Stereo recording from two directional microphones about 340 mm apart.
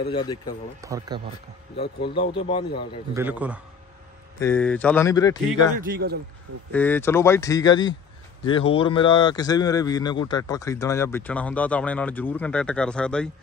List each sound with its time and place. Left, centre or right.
0.1 s speech: centre
0.7 s speech: centre
2.1 s speech: centre
3.2 s a man's voice: centre
5.8 s a man's voice: right
6.7 s speech: centre